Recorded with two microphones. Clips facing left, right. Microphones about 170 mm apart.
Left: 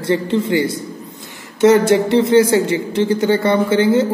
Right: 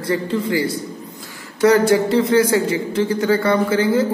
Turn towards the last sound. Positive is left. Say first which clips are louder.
# left 3 dB
turn(degrees=25)  # may be behind; listen again after turning